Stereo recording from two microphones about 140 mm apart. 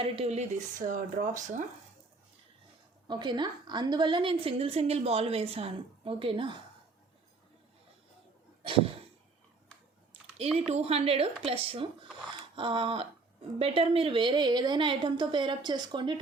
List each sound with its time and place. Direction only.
0.0 s speech: 50° right (ahead or behind)
3.1 s a woman's voice: 35° right (ahead or behind)
10.7 s a woman's voice: 45° right (ahead or behind)